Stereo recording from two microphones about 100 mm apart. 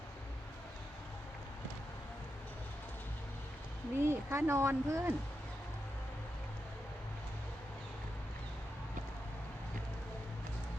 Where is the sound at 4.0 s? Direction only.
25° right (ahead or behind).